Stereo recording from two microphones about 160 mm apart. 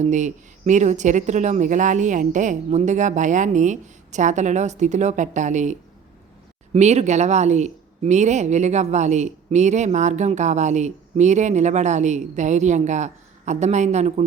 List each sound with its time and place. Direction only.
0.0 s speech: 50° right (ahead or behind)
6.7 s speech: 45° right (ahead or behind)